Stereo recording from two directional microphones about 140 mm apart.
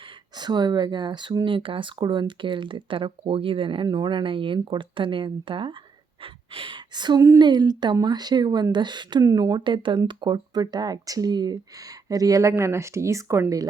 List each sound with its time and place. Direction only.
0.3 s speech: 30° right (ahead or behind)